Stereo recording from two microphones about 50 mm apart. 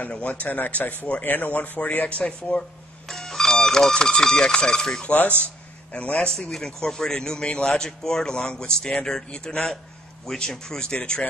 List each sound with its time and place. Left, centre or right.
0.0 s speech: left
3.1 s music: centre
3.9 s a man's voice: centre
5.4 s a sound: left
6.1 s a man's voice: centre